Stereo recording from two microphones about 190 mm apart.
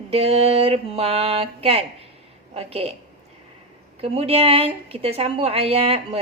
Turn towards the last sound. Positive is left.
turn(degrees=-30)  # may be behind; listen again after turning